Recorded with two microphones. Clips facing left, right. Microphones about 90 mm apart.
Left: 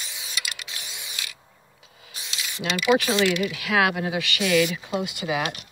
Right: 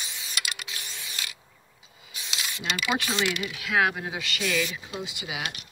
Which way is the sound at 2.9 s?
90° left.